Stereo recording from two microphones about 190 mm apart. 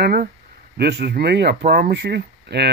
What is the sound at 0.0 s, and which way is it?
Speech, 50° right (ahead or behind).